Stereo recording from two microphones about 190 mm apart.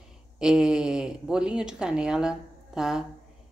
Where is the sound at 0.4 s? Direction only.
5° right (ahead or behind).